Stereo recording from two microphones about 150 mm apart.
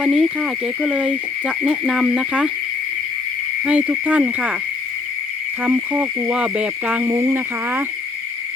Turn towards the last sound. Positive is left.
turn(degrees=-15)  # may be behind; listen again after turning